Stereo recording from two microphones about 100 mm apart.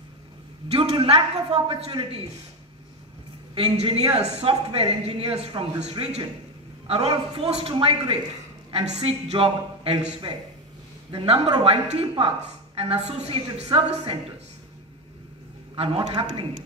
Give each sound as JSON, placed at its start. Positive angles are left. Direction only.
{"t": 0.7, "sound": "a man's voice", "side_deg": -80}
{"t": 3.7, "sound": "speech", "side_deg": -80}
{"t": 6.9, "sound": "a woman's voice", "side_deg": -75}
{"t": 7.7, "sound": "a woman's voice", "side_deg": -70}
{"t": 8.7, "sound": "speech", "side_deg": -90}
{"t": 11.1, "sound": "a woman's voice", "side_deg": -80}
{"t": 15.7, "sound": "a man's voice", "side_deg": -70}